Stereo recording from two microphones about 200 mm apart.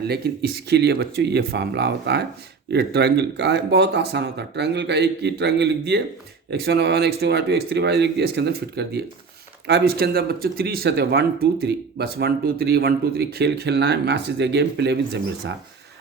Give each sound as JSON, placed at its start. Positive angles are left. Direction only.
{"t": 0.1, "sound": "speech", "side_deg": -55}